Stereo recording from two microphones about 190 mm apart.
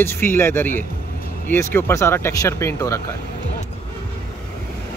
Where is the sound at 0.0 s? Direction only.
10° left (ahead or behind).